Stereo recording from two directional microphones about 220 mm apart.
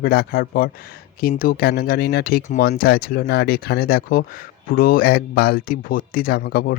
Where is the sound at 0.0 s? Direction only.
45° left (ahead or behind).